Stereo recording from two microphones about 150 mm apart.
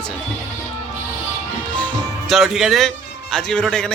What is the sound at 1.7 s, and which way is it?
Speech, 5° left (ahead or behind).